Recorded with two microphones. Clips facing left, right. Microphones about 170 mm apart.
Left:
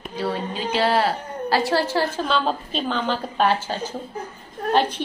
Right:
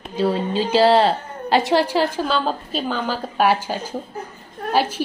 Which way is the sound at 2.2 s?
Centre (ahead or behind).